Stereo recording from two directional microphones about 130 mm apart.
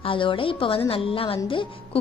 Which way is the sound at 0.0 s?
40° left (ahead or behind).